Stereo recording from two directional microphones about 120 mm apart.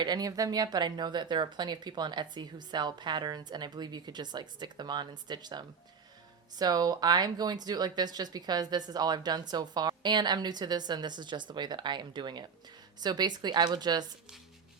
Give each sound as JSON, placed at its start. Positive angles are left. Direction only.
{"t": 0.0, "sound": "speech", "side_deg": -35}